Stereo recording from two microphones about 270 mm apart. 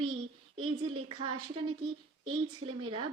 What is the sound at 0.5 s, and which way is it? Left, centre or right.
Speech, centre.